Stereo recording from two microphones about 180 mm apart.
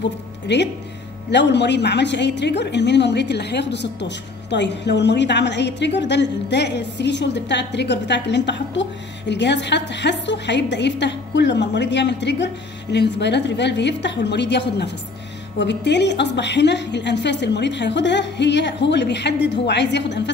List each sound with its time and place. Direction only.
0.5 s a woman's voice: 75° left (ahead or behind)